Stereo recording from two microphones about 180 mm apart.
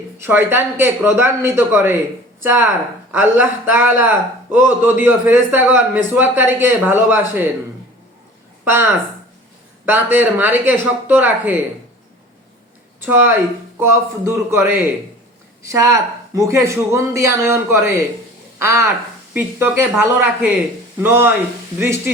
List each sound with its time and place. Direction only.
0.2 s a man's voice: 10° right (ahead or behind)
8.6 s a man's voice: 15° right (ahead or behind)
13.0 s a man's voice: 15° right (ahead or behind)